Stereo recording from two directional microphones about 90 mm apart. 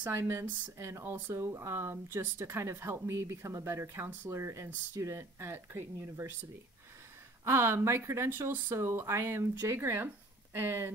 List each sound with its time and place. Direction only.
0.1 s speech: 30° right (ahead or behind)
7.4 s speech: 30° right (ahead or behind)